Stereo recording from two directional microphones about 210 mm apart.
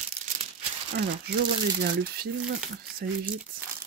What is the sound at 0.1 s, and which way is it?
Crumpling, 30° right (ahead or behind).